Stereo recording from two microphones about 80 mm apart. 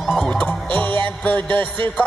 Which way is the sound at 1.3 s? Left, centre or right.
Right.